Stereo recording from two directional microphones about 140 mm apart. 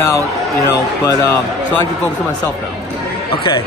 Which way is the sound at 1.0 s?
20° left (ahead or behind).